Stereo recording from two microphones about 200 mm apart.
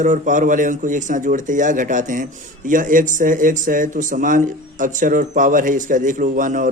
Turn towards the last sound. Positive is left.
turn(degrees=-40)  # may be behind; listen again after turning